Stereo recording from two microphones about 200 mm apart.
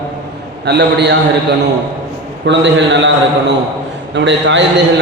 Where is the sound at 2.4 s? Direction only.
65° right (ahead or behind).